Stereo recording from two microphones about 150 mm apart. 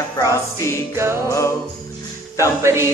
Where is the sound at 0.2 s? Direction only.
20° left (ahead or behind).